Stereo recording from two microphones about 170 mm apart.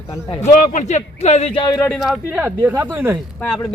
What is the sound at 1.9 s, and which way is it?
Speech, centre (ahead or behind).